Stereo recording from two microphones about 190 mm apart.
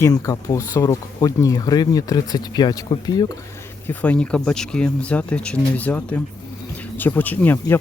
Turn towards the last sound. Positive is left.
turn(degrees=10)  # may be behind; listen again after turning